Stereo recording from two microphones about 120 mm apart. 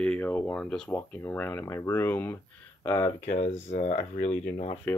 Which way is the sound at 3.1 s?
65° left (ahead or behind).